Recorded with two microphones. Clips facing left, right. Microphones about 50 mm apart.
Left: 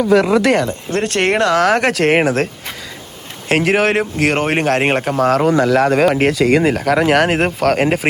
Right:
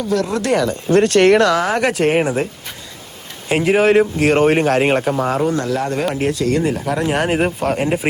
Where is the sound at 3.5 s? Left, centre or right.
Left.